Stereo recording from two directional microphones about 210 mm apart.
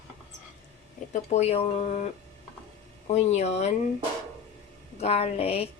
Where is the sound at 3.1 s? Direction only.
30° left (ahead or behind).